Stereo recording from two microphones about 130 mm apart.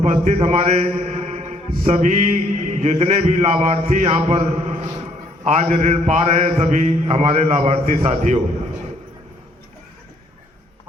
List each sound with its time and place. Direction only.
0.0 s a man's voice: 60° right (ahead or behind)